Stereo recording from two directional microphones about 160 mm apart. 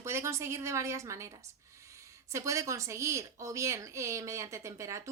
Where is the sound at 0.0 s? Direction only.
15° right (ahead or behind).